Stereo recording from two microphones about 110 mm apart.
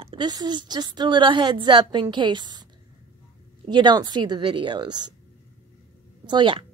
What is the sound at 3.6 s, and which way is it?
A woman's voice, 45° right (ahead or behind).